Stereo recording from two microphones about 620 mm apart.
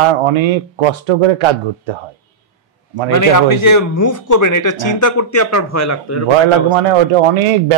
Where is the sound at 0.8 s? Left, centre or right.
Right.